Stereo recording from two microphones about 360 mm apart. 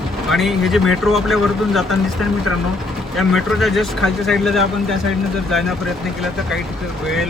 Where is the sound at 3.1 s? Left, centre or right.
Centre.